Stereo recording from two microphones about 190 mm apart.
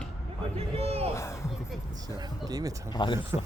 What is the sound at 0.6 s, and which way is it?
Speech, 30° right (ahead or behind).